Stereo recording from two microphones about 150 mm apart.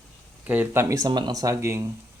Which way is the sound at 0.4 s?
10° right (ahead or behind).